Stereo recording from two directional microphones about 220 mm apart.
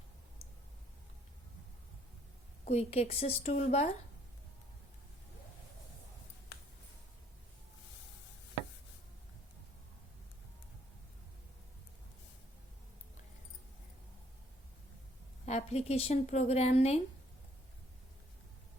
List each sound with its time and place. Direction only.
2.6 s speech: 30° left (ahead or behind)
15.4 s speech: 30° left (ahead or behind)